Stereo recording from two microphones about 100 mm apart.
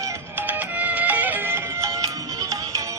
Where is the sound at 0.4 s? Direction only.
15° right (ahead or behind).